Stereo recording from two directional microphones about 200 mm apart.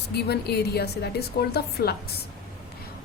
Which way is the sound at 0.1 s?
55° left (ahead or behind).